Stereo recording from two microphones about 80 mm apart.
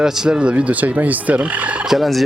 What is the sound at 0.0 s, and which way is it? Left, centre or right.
Frog, centre.